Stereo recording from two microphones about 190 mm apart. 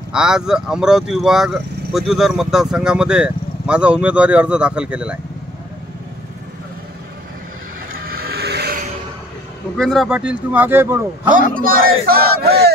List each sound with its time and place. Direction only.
0.1 s speech: 5° right (ahead or behind)
7.9 s vehicle: 50° right (ahead or behind)
9.8 s a man's voice: centre (ahead or behind)
11.3 s a man's voice: 50° right (ahead or behind)
12.1 s battle cry: 55° right (ahead or behind)